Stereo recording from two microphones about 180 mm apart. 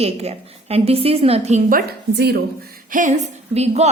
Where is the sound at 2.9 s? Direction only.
40° right (ahead or behind).